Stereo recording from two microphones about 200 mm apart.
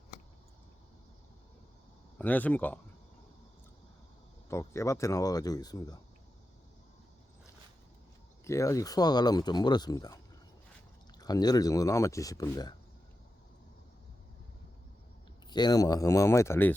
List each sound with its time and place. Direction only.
2.1 s speech: 10° left (ahead or behind)
4.4 s speech: 15° left (ahead or behind)
8.4 s speech: 15° left (ahead or behind)
11.2 s speech: 20° left (ahead or behind)
15.4 s speech: 20° left (ahead or behind)